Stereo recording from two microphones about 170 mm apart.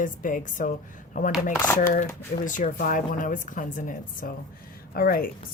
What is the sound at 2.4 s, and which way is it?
A woman's voice, 50° left (ahead or behind).